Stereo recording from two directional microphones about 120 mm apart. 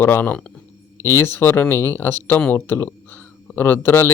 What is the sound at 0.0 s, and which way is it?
Speech, 15° left (ahead or behind).